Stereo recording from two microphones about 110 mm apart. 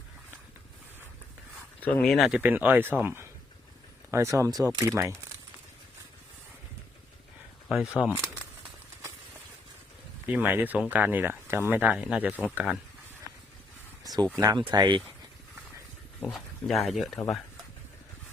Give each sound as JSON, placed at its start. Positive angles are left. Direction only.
{"t": 1.8, "sound": "speech", "side_deg": 5}
{"t": 2.4, "sound": "speech", "side_deg": -15}
{"t": 7.7, "sound": "speech", "side_deg": -5}
{"t": 10.2, "sound": "speech", "side_deg": -15}
{"t": 14.0, "sound": "a sound", "side_deg": -35}
{"t": 14.3, "sound": "speech", "side_deg": -30}
{"t": 14.6, "sound": "speech", "side_deg": -45}
{"t": 16.3, "sound": "speech", "side_deg": 0}